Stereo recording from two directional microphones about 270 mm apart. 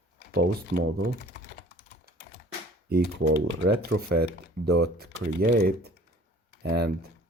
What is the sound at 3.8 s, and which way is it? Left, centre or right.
Speech, right.